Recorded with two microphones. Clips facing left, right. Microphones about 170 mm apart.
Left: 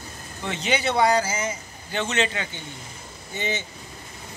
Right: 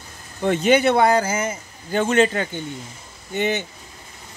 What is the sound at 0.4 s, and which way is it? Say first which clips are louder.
Speech: right 10 dB; 50° right (ahead or behind).